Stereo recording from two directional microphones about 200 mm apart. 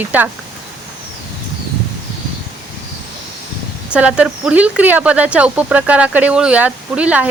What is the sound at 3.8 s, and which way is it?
Speech, 5° right (ahead or behind).